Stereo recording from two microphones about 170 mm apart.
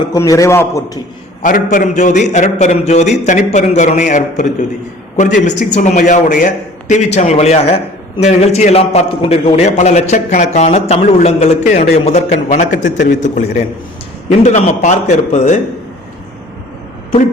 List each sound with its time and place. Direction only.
0.1 s a man's voice: 20° left (ahead or behind)
1.4 s a man's voice: 50° left (ahead or behind)